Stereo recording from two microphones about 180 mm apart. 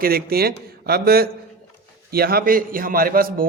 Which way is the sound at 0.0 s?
55° right (ahead or behind).